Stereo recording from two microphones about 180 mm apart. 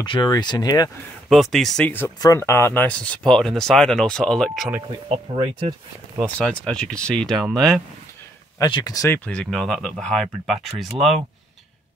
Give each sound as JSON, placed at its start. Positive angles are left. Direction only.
{"t": 0.0, "sound": "speech", "side_deg": 25}
{"t": 1.3, "sound": "speech", "side_deg": 0}
{"t": 5.1, "sound": "speech", "side_deg": -30}
{"t": 6.3, "sound": "speech", "side_deg": 5}
{"t": 8.5, "sound": "speech", "side_deg": 25}